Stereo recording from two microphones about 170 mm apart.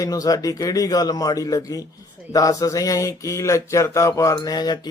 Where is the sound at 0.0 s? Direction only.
20° left (ahead or behind).